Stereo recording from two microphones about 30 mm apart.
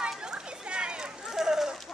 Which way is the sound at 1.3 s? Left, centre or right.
Centre.